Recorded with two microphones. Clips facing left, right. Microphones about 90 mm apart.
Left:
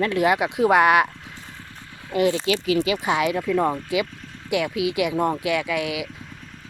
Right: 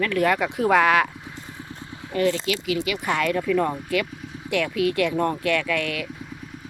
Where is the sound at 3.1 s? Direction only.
10° left (ahead or behind).